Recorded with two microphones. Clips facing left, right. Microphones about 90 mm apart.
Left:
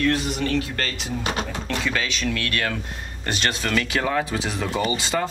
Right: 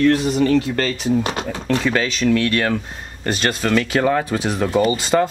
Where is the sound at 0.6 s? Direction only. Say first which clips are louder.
Right 7 dB; 25° right (ahead or behind).